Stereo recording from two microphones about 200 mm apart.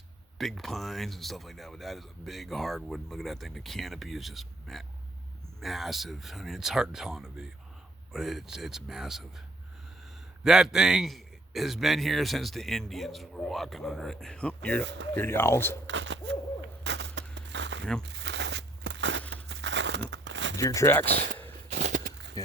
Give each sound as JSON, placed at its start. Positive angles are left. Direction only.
{"t": 0.3, "sound": "speech", "side_deg": 0}
{"t": 10.4, "sound": "speech", "side_deg": 0}
{"t": 15.9, "sound": "hoot", "side_deg": -65}
{"t": 16.8, "sound": "a sound", "side_deg": -60}
{"t": 19.3, "sound": "crumpling", "side_deg": -65}
{"t": 20.6, "sound": "speech", "side_deg": 15}
{"t": 21.1, "sound": "speech", "side_deg": -45}
{"t": 21.7, "sound": "a sound", "side_deg": -35}
{"t": 22.4, "sound": "speech", "side_deg": 15}